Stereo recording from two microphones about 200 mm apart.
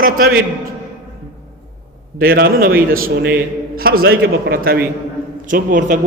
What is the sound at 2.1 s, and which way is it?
A man's voice, 45° right (ahead or behind).